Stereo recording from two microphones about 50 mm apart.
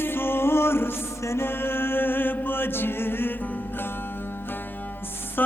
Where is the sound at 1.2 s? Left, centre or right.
Left.